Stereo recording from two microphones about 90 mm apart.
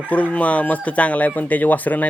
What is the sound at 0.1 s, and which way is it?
Speech, 15° left (ahead or behind).